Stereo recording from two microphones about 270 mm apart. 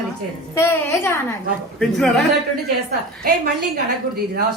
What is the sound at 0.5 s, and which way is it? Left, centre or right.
A woman's voice, centre.